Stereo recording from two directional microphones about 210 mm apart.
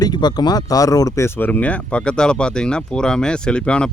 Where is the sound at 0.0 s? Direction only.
20° left (ahead or behind).